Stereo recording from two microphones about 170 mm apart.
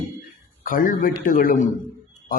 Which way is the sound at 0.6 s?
55° left (ahead or behind).